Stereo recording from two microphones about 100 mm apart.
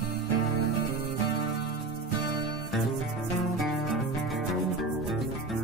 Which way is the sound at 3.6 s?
Centre (ahead or behind).